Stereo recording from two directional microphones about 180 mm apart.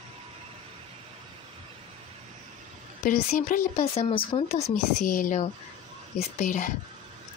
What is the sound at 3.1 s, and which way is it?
Speech, 50° left (ahead or behind).